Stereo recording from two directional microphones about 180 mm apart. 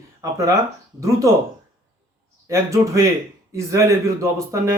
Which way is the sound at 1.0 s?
15° right (ahead or behind).